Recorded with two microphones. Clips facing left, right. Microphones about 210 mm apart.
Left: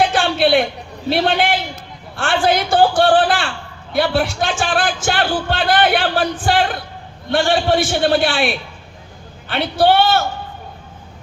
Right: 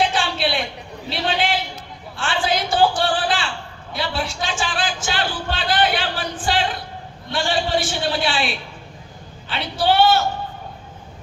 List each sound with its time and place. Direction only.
0.1 s a sound: 55° left (ahead or behind)
1.1 s a man's voice: 55° left (ahead or behind)
9.5 s a man's voice: 55° left (ahead or behind)